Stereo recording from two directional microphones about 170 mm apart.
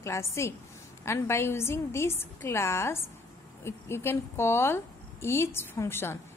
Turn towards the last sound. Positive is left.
turn(degrees=15)  # may be behind; listen again after turning